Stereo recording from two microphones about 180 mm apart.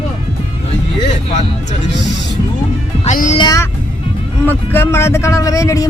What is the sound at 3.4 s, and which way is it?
Music, 20° left (ahead or behind).